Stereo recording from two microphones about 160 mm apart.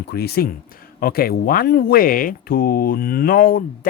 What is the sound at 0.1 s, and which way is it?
Speech, 80° left.